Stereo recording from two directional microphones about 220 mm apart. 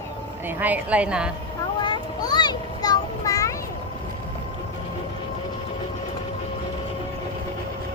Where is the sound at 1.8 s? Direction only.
20° left (ahead or behind).